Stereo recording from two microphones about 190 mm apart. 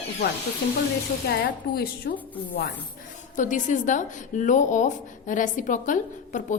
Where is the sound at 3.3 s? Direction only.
40° left (ahead or behind).